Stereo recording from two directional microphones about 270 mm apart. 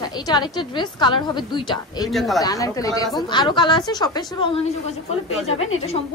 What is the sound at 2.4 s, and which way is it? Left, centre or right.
A woman's voice, centre.